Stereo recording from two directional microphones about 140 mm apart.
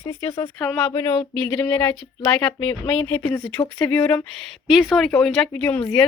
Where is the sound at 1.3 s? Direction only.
10° left (ahead or behind).